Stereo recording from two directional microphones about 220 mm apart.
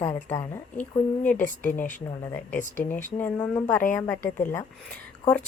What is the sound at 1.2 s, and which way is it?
Speech, 35° left (ahead or behind).